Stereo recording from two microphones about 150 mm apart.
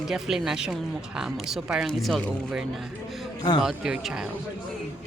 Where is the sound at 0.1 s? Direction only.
5° right (ahead or behind).